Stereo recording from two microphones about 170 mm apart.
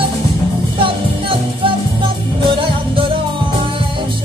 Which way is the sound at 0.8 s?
30° right (ahead or behind).